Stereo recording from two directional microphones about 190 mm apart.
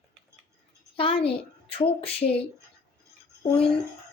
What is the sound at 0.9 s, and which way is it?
A woman's voice, 30° left (ahead or behind).